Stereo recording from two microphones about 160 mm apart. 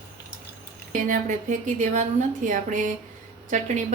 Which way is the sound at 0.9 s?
55° right (ahead or behind).